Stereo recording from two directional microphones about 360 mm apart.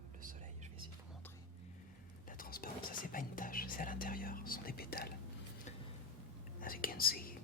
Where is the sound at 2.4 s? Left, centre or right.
Left.